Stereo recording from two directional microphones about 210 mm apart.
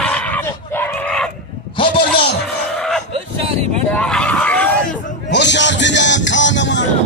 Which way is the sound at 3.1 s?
30° right (ahead or behind).